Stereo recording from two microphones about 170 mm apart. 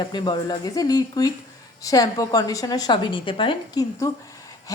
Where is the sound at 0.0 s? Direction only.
25° left (ahead or behind).